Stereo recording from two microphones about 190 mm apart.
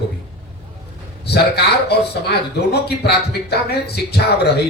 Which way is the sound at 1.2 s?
60° left (ahead or behind).